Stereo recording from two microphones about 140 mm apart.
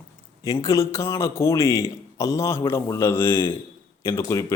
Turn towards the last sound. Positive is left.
turn(degrees=25)  # may be behind; listen again after turning